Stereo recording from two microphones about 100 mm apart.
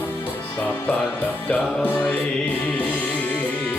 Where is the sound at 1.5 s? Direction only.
20° left (ahead or behind).